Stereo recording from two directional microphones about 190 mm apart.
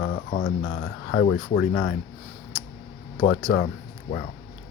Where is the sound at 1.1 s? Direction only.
65° left (ahead or behind).